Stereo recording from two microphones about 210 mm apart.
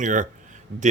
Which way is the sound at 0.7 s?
55° right (ahead or behind).